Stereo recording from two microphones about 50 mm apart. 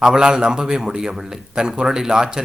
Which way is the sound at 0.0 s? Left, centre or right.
Centre.